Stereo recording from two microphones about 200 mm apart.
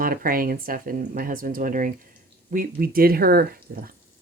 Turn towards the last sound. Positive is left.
turn(degrees=-50)  # may be behind; listen again after turning